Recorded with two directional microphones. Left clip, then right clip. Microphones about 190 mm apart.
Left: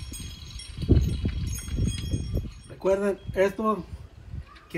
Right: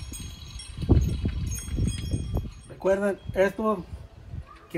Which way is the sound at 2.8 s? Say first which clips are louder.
Even; 15° right (ahead or behind).